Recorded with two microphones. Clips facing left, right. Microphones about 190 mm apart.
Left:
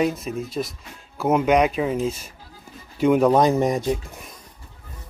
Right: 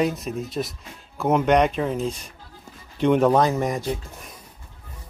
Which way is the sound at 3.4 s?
15° left (ahead or behind).